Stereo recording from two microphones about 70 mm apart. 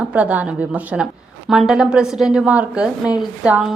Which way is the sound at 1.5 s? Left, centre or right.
Centre.